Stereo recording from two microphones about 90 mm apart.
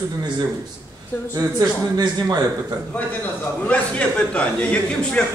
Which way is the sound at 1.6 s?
45° right (ahead or behind).